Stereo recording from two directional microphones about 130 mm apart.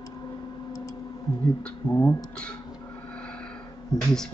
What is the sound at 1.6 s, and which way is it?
Speech, 10° left (ahead or behind).